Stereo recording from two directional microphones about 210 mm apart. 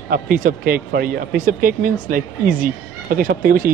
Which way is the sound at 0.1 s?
40° right (ahead or behind).